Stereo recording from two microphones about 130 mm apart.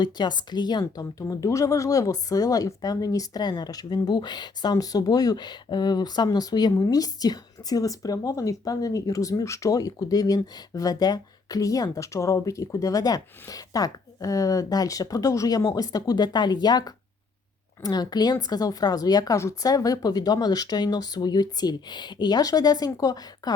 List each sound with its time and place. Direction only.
0.0 s speech: 35° left (ahead or behind)